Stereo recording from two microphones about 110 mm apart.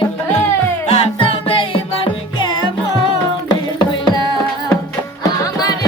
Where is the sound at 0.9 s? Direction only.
60° left (ahead or behind); by 4.2 s 40° left (ahead or behind).